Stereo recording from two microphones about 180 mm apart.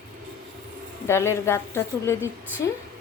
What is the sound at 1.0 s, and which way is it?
A woman's voice, 15° left (ahead or behind).